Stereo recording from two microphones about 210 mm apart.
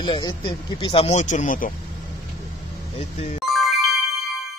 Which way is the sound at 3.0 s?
30° left (ahead or behind).